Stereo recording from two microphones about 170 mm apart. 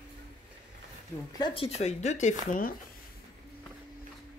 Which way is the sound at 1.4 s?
30° left (ahead or behind).